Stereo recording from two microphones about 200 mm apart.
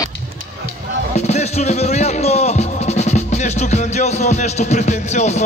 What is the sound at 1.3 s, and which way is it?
Speech, 35° left (ahead or behind).